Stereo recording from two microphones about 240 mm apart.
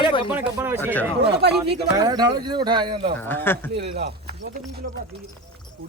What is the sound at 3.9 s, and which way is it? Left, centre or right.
Speech, right.